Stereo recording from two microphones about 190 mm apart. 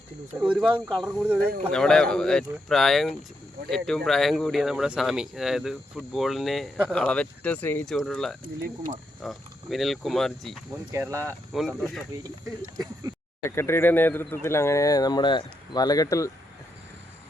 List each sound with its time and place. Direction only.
0.3 s speech: 5° right (ahead or behind)
10.9 s speech: 15° right (ahead or behind)
11.5 s speech: centre (ahead or behind)
13.4 s speech: 15° left (ahead or behind)